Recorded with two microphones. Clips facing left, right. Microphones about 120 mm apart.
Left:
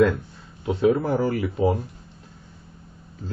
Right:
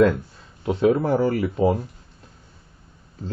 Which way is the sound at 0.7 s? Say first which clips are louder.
Right 1 dB; 35° right (ahead or behind).